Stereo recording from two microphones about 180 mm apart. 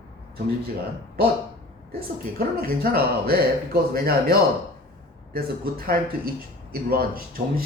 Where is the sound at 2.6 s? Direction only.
55° right (ahead or behind).